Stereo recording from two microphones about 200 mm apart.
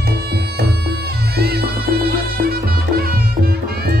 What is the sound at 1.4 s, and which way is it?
Music, 55° right (ahead or behind).